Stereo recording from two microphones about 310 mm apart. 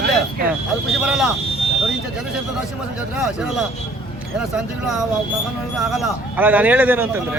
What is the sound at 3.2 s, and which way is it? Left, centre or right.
Speech, centre.